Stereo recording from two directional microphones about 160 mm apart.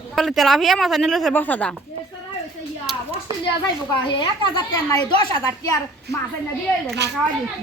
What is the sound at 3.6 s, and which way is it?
A woman's voice, 30° left (ahead or behind).